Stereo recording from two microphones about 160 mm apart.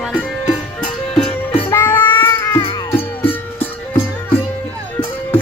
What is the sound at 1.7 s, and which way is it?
Music, 15° left (ahead or behind).